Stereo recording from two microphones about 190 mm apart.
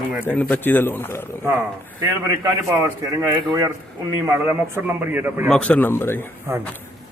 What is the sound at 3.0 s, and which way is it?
A man's voice, 15° right (ahead or behind).